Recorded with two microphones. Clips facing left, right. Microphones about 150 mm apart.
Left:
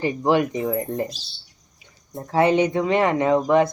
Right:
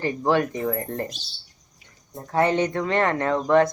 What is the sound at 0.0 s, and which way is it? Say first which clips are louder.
Speech: left 2 dB; 15° left (ahead or behind).